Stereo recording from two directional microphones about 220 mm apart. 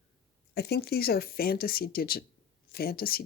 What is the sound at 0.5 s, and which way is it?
Speech, 45° left (ahead or behind).